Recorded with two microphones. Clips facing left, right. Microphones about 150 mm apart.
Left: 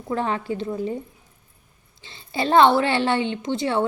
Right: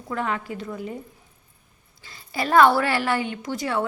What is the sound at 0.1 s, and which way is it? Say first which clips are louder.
Speech: left 3 dB; 30° left (ahead or behind).